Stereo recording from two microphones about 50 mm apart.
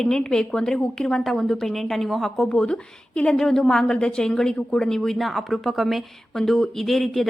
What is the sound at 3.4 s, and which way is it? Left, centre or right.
A woman's voice, centre.